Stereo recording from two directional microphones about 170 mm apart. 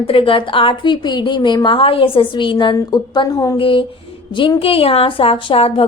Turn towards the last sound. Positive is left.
turn(degrees=35)  # may be behind; listen again after turning